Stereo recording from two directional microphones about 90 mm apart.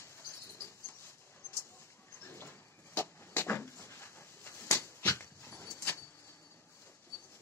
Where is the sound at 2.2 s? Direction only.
25° left (ahead or behind).